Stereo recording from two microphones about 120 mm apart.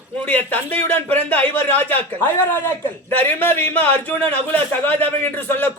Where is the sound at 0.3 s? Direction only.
15° left (ahead or behind).